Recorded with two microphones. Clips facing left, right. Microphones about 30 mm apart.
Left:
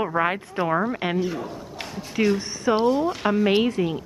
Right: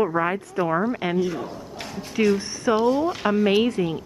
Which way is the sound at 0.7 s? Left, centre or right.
Centre.